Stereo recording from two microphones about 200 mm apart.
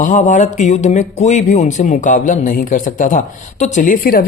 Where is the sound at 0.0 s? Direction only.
40° left (ahead or behind).